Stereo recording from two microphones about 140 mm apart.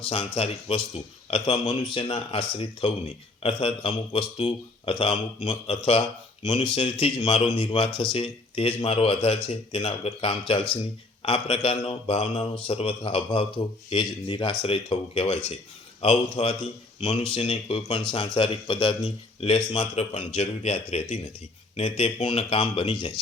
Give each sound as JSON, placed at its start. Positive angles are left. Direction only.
{"t": 0.0, "sound": "a man's voice", "side_deg": 45}